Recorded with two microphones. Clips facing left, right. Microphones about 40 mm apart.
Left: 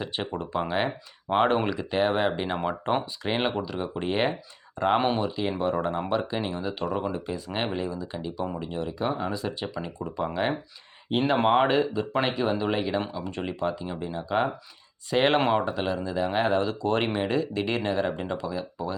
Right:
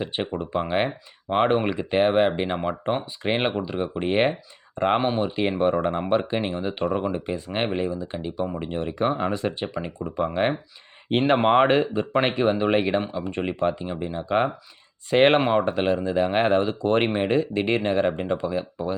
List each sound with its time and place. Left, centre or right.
0.0 s speech: right
1.7 s speech: right
2.6 s speech: centre
3.2 s speech: right
4.9 s speech: centre
5.4 s speech: right
11.1 s speech: right
11.4 s speech: right
13.8 s speech: right
15.4 s speech: centre
15.6 s speech: right